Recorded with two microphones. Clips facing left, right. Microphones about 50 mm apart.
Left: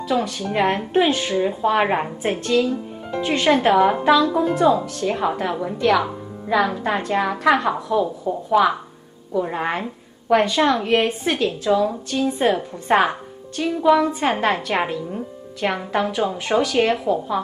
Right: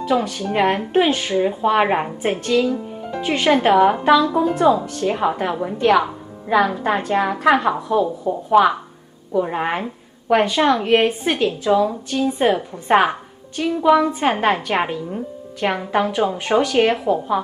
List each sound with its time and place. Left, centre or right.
0.1 s a woman's voice: centre
3.4 s a woman's voice: centre
4.7 s a woman's voice: right
5.0 s a woman's voice: centre